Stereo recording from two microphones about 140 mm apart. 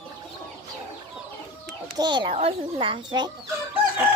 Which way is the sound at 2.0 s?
35° right (ahead or behind).